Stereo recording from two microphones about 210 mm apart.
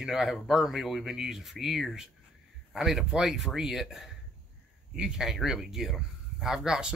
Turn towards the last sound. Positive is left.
turn(degrees=-5)  # may be behind; listen again after turning